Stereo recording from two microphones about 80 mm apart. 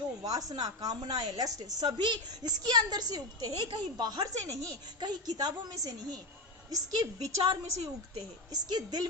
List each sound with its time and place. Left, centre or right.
0.2 s a woman's voice: right
4.9 s a woman's voice: right